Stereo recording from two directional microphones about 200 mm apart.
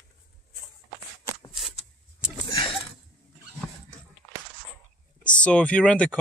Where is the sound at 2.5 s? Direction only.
25° left (ahead or behind).